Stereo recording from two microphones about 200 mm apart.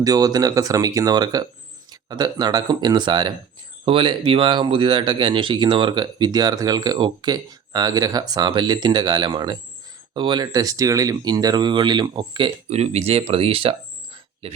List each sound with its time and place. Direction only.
0.0 s speech: 20° right (ahead or behind)